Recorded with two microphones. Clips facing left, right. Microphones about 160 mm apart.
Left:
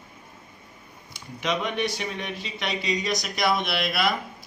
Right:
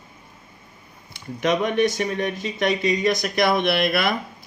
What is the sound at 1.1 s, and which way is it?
Speech, 50° right (ahead or behind).